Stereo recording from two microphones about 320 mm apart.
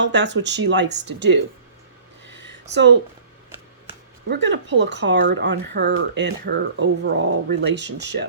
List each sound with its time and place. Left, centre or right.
0.0 s speech: right
2.2 s a sound: right
4.3 s speech: right